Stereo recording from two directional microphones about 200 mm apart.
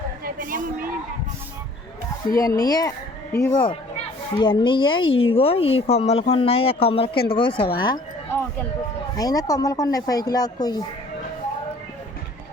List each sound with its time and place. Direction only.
0.3 s a sound: 45° right (ahead or behind)
2.3 s speech: 15° left (ahead or behind)
3.6 s a woman's voice: 25° left (ahead or behind)